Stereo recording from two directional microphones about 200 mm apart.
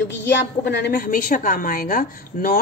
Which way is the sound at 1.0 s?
40° left (ahead or behind).